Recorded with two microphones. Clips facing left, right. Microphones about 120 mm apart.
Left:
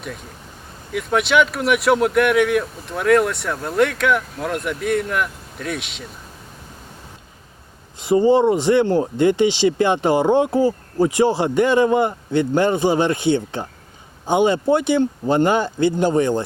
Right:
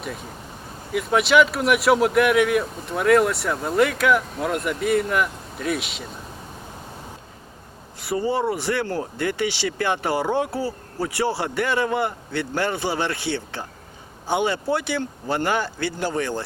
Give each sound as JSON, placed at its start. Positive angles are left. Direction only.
{"t": 0.9, "sound": "speech", "side_deg": 0}
{"t": 7.9, "sound": "speech", "side_deg": 20}